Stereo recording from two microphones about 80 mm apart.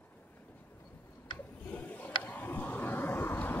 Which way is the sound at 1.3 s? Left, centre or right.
Left.